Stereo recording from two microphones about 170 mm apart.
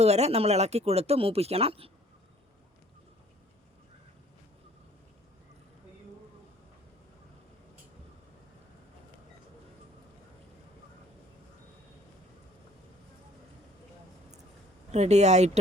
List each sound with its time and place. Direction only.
0.0 s speech: 40° right (ahead or behind)
14.9 s speech: 40° right (ahead or behind)